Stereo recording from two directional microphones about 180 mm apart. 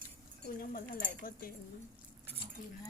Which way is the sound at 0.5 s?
55° left (ahead or behind).